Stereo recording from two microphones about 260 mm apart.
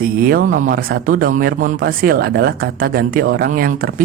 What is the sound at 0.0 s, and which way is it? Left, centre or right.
Speech, right.